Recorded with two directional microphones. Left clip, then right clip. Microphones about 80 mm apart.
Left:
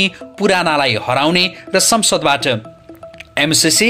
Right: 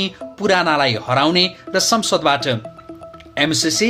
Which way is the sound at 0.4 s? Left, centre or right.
Left.